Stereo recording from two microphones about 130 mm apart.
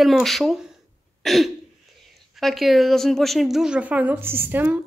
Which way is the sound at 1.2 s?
Centre (ahead or behind).